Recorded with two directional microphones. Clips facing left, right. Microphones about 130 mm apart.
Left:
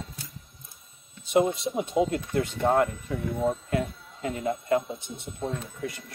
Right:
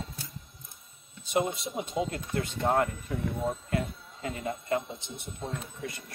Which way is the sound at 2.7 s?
Centre (ahead or behind).